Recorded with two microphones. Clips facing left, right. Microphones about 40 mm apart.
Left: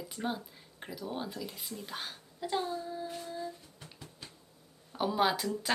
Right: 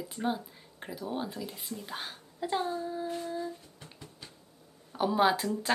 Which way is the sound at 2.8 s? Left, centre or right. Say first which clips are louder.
Right 5 dB; centre.